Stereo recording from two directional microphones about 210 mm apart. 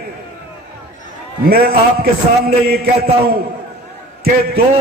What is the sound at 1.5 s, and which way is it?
Speech, 45° right (ahead or behind).